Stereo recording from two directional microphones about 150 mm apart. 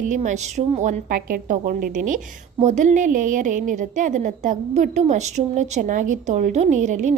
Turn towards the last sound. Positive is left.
turn(degrees=-55)  # may be behind; listen again after turning